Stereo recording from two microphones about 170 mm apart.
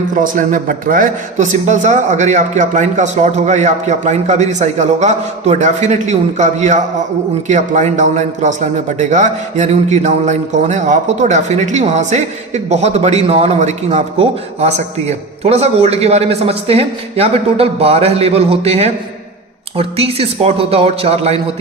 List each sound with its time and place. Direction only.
0.1 s a man's voice: 50° right (ahead or behind); by 21.4 s 35° right (ahead or behind)